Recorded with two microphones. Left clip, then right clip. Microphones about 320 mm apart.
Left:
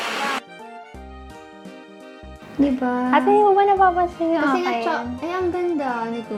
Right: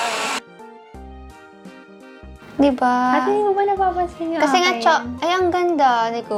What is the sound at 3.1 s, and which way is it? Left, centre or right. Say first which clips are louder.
Speech: left 2 dB; left.